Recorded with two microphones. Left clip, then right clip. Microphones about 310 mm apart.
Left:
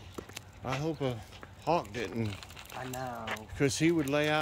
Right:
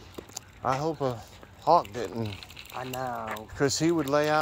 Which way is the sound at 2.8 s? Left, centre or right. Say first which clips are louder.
Right 6 dB; centre.